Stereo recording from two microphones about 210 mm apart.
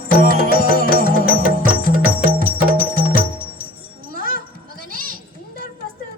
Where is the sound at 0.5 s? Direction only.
45° right (ahead or behind).